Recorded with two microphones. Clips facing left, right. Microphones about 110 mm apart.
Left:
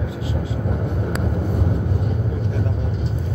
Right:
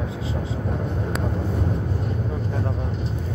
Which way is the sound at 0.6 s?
15° left (ahead or behind).